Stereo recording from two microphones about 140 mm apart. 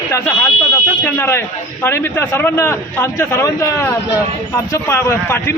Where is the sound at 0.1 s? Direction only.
15° left (ahead or behind).